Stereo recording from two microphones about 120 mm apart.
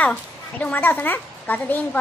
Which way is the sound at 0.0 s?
10° left (ahead or behind).